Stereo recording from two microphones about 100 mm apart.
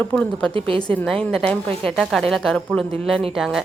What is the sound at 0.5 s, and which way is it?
Speech, 65° right (ahead or behind).